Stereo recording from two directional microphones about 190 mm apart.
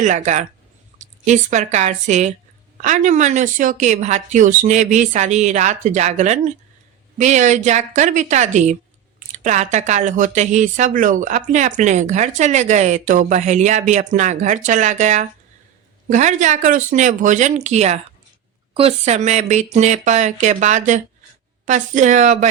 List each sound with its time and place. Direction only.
0.0 s speech: 40° right (ahead or behind)